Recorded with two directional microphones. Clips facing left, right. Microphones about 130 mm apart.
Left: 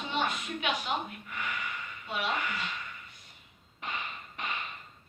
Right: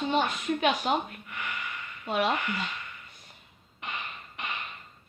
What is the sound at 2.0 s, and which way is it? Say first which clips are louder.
Speech: right 8 dB; 45° right (ahead or behind).